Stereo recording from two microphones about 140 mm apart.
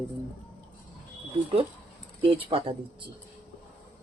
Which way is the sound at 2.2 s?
40° right (ahead or behind).